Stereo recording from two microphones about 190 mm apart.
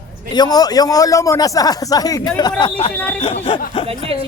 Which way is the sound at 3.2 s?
30° left (ahead or behind).